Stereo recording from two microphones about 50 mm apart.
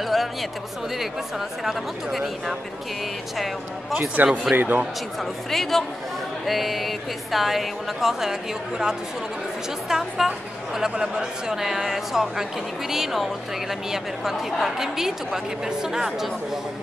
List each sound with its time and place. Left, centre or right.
0.0 s chatter: centre
1.6 s speech: centre
4.2 s speech: right
4.6 s speech: right
5.2 s a woman's voice: centre